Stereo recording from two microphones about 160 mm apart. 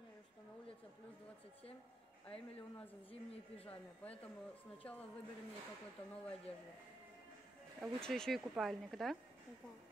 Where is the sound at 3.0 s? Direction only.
35° left (ahead or behind).